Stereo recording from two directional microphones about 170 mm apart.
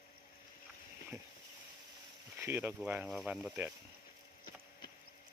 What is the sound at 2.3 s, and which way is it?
Speech, 15° right (ahead or behind).